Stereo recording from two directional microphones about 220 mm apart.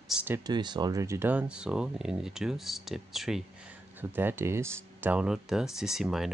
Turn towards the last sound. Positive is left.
turn(degrees=0)  # may be behind; listen again after turning